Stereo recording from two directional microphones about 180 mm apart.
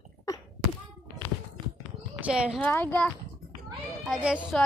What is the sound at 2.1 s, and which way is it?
Speech, 5° right (ahead or behind).